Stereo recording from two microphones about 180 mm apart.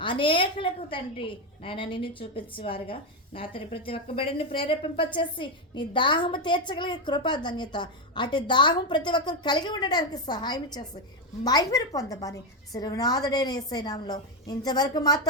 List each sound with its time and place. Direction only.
0.0 s a woman's voice: 30° left (ahead or behind)